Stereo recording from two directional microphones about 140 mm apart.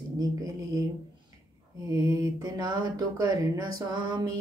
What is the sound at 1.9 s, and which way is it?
Speech, 25° right (ahead or behind).